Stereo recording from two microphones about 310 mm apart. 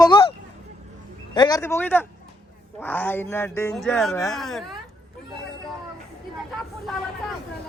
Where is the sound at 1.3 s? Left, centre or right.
Centre.